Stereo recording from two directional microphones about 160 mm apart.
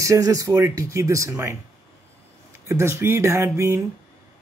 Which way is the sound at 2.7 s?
15° right (ahead or behind).